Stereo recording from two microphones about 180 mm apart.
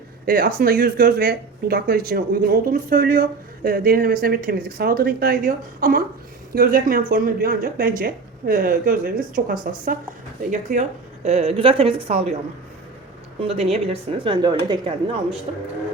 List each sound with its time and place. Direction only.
0.3 s a woman's voice: 55° right (ahead or behind); by 12.3 s 35° right (ahead or behind)
13.5 s a woman's voice: 35° right (ahead or behind)